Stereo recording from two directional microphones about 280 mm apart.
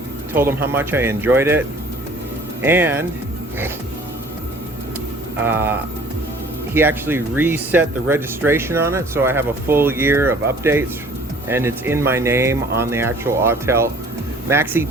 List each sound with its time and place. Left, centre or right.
0.3 s speech: centre
5.4 s speech: centre